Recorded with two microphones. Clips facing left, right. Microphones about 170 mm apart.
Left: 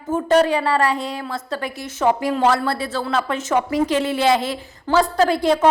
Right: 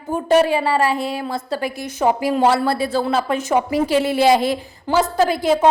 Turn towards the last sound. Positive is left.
turn(degrees=-5)  # may be behind; listen again after turning